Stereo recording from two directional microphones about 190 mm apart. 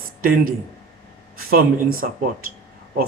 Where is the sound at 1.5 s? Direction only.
50° right (ahead or behind).